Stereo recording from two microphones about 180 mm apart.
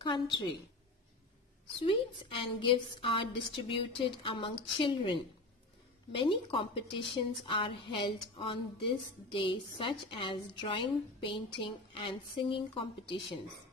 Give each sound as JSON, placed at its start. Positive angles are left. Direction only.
{"t": 0.0, "sound": "a woman's voice", "side_deg": 25}
{"t": 1.8, "sound": "a woman's voice", "side_deg": 30}